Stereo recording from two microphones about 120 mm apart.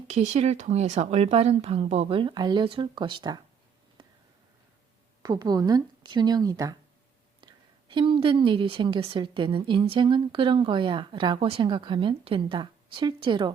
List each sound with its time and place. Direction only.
0.1 s speech: 70° right (ahead or behind); by 3.3 s 40° right (ahead or behind)
4.0 s a sound: 45° right (ahead or behind)
5.2 s speech: 35° right (ahead or behind)
7.4 s a woman's voice: 45° right (ahead or behind)
11.6 s a woman's voice: 40° right (ahead or behind)